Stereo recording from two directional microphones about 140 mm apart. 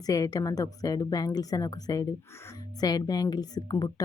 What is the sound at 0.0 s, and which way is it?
Speech, 25° left (ahead or behind).